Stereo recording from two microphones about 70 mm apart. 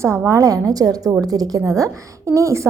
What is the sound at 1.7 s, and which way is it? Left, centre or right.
Speech, right.